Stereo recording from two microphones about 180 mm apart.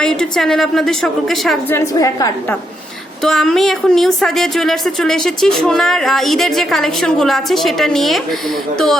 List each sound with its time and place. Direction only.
0.0 s speech: 5° left (ahead or behind)
1.7 s a woman's voice: 20° left (ahead or behind)
3.2 s speech: 5° left (ahead or behind)